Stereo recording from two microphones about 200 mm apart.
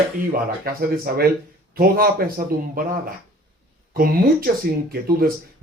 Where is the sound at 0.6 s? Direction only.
45° right (ahead or behind).